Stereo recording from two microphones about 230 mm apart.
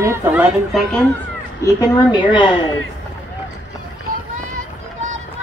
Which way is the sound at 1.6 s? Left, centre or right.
Centre.